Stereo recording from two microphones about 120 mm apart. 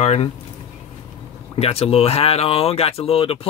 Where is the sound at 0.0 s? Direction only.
60° left (ahead or behind).